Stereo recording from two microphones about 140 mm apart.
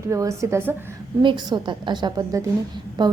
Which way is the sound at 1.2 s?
35° right (ahead or behind).